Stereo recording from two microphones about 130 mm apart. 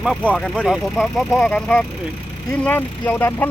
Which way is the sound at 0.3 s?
5° left (ahead or behind).